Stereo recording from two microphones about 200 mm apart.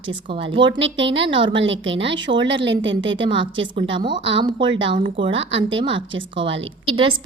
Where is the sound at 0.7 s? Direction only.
65° right (ahead or behind).